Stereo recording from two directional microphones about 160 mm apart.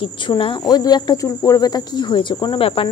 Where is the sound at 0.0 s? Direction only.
30° left (ahead or behind).